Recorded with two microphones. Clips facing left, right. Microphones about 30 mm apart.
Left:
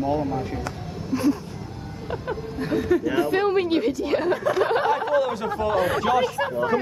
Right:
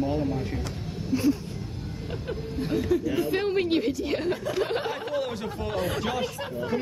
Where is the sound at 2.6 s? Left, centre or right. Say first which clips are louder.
Left 4 dB; centre.